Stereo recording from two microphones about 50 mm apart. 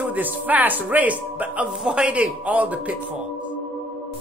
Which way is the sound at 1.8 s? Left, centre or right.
Centre.